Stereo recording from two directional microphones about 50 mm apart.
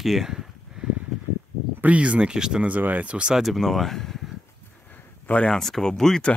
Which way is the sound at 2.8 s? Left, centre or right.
Right.